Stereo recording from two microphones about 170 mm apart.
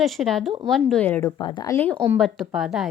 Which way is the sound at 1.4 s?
25° left (ahead or behind).